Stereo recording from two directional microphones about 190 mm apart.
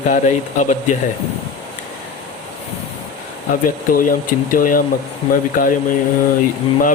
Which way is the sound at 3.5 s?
50° left (ahead or behind).